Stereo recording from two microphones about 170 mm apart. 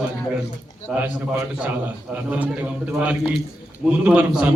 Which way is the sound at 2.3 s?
10° right (ahead or behind).